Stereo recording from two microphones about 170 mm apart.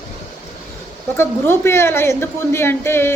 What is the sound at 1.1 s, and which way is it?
A woman's voice, 15° left (ahead or behind).